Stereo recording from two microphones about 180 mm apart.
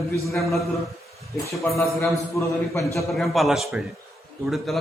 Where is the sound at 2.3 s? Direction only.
15° left (ahead or behind).